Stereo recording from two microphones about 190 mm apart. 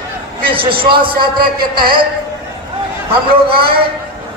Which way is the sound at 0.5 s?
25° right (ahead or behind).